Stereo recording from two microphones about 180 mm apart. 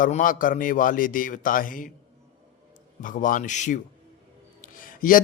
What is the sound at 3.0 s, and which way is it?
A man's voice, 50° left (ahead or behind).